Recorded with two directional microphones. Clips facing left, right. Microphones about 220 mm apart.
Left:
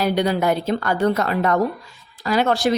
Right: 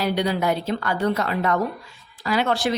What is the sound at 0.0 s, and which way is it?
Speech, 50° left (ahead or behind).